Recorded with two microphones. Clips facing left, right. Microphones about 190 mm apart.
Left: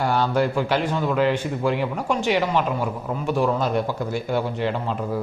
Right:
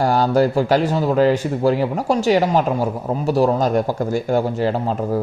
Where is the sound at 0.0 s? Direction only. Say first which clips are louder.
Right 5 dB; 40° right (ahead or behind).